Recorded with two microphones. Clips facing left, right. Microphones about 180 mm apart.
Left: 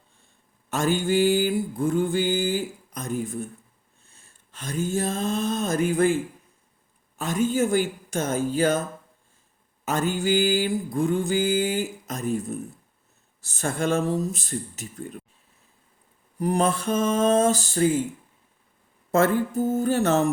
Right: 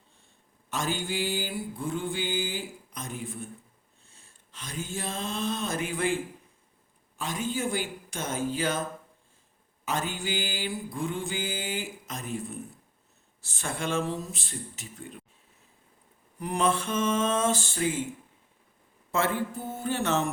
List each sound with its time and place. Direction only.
0.7 s mantra: 50° left (ahead or behind)
4.1 s a sound: 50° left (ahead or behind)
7.2 s mantra: 45° left (ahead or behind)
9.8 s mantra: 45° left (ahead or behind)
16.4 s mantra: 40° left (ahead or behind)
19.1 s mantra: 45° left (ahead or behind)